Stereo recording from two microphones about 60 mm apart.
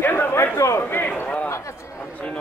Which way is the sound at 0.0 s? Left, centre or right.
Left.